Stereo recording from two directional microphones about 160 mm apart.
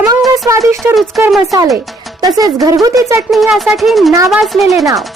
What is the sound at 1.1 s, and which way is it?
Speech, centre (ahead or behind).